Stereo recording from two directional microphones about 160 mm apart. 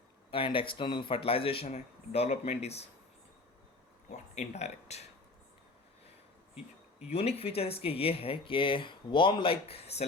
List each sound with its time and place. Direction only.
0.3 s speech: 35° left (ahead or behind)
4.1 s speech: 45° left (ahead or behind)
7.1 s speech: 40° left (ahead or behind)